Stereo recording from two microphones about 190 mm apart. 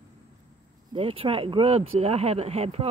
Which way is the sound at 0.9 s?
30° right (ahead or behind).